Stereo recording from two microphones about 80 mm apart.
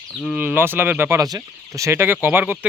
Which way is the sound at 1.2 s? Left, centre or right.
Right.